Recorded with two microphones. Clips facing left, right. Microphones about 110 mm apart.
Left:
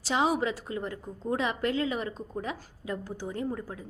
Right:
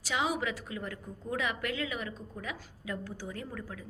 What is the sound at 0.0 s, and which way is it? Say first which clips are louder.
A woman's voice: left 5 dB; 35° left (ahead or behind).